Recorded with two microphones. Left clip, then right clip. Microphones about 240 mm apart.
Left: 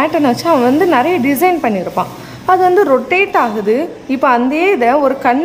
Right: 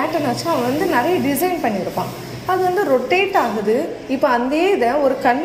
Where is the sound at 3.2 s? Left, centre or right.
Left.